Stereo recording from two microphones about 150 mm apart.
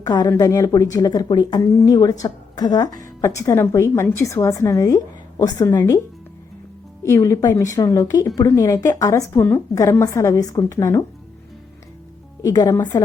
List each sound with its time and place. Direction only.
0.0 s a woman's voice: 25° left (ahead or behind)
7.0 s a woman's voice: 20° left (ahead or behind)
12.4 s a woman's voice: 20° left (ahead or behind)